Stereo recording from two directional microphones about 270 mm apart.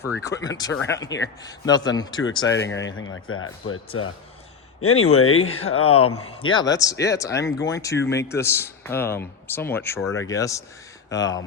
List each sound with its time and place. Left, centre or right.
0.2 s a man's voice: centre
2.6 s speech: left
5.4 s speech: left
5.9 s a man's voice: left
6.3 s a man's voice: centre